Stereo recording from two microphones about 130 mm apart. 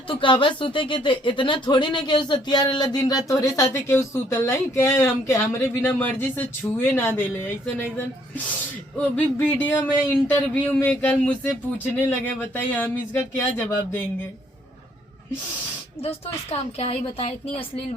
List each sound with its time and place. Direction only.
0.1 s speech: 40° left (ahead or behind); by 8.0 s 15° left (ahead or behind)
9.1 s speech: 15° left (ahead or behind)
16.0 s a woman's voice: 50° left (ahead or behind)